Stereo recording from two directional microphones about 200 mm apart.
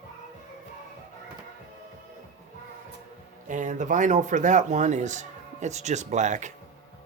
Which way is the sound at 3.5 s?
40° right (ahead or behind).